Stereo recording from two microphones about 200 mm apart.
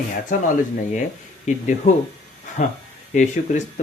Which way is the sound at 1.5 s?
35° left (ahead or behind).